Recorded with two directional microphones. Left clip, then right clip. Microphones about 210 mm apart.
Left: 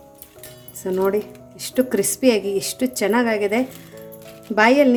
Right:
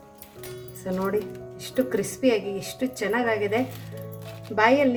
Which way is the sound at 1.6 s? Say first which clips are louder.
Left 5 dB; 45° left (ahead or behind).